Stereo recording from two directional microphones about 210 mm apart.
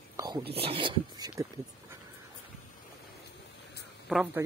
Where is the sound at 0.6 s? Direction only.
25° right (ahead or behind).